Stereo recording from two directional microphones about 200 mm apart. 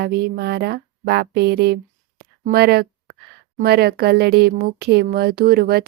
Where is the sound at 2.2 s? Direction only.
50° right (ahead or behind).